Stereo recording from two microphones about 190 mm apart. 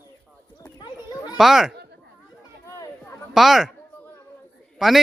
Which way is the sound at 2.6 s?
15° left (ahead or behind).